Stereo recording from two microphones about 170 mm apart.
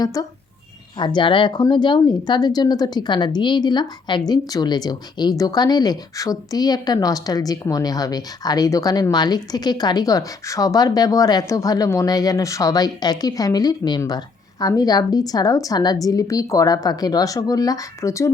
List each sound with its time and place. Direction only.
0.0 s speech: 20° left (ahead or behind)